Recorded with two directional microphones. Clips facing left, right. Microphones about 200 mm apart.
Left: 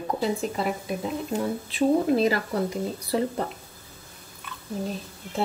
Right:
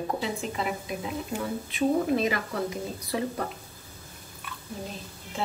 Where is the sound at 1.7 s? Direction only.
30° left (ahead or behind).